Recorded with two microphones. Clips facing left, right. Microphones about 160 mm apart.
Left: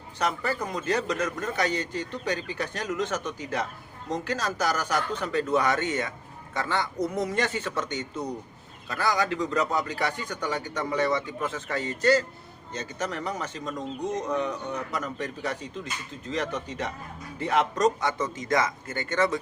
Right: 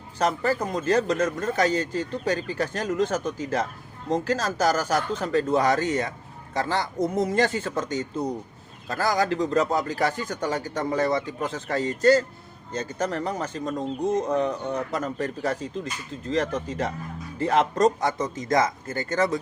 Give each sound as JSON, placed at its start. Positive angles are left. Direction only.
{"t": 0.2, "sound": "a man's voice", "side_deg": -40}